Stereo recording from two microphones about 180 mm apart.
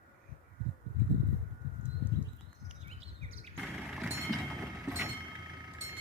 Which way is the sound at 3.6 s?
5° right (ahead or behind).